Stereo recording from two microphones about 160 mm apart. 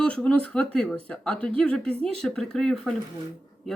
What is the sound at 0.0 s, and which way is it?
Speech, 5° left (ahead or behind).